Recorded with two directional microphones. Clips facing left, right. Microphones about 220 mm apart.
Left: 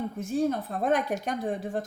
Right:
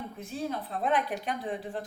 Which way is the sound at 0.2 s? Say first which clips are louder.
Left 8 dB; 45° left (ahead or behind).